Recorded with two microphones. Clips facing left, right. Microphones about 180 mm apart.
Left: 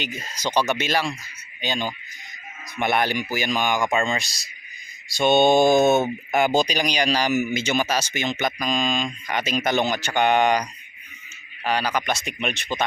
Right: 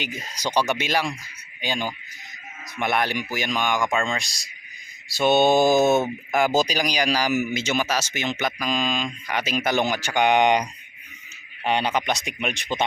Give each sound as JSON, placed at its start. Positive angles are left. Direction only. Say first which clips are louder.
{"t": 0.0, "sound": "speech", "louder": "left 1 dB", "side_deg": -15}
{"t": 2.7, "sound": "speech", "louder": "left 2 dB", "side_deg": 0}